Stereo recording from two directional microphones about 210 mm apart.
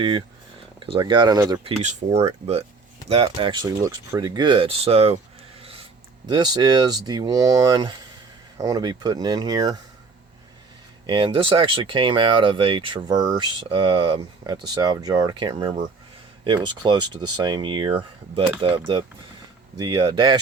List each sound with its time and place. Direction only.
0.8 s speech: 20° right (ahead or behind)
1.8 s speech: 35° right (ahead or behind); by 9.8 s 15° right (ahead or behind)
11.0 s speech: 25° right (ahead or behind)